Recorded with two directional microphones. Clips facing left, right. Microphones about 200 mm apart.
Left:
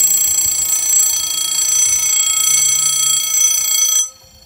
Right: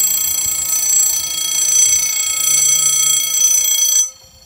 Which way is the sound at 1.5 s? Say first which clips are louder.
Right 1 dB; 30° right (ahead or behind).